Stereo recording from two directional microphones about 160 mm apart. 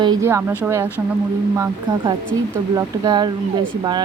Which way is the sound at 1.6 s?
25° right (ahead or behind).